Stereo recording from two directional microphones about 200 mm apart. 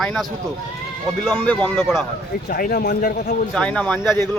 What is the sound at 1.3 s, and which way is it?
Speech, 10° left (ahead or behind).